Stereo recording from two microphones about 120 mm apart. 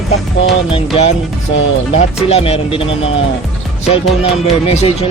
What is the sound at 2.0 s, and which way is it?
Speech, 60° left (ahead or behind).